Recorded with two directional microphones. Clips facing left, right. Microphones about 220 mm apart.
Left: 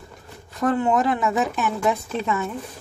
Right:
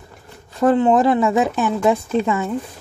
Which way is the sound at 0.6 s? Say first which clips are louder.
Right 6 dB; 25° right (ahead or behind).